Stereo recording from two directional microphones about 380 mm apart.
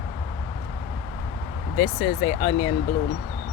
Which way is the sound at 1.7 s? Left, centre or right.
Centre.